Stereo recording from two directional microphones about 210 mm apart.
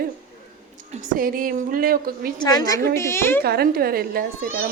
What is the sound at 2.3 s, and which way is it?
A woman's voice, 20° left (ahead or behind).